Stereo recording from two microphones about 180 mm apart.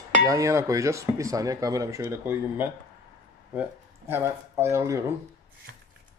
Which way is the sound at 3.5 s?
10° right (ahead or behind).